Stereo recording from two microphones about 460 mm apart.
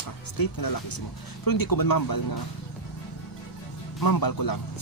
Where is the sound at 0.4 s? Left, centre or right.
Left.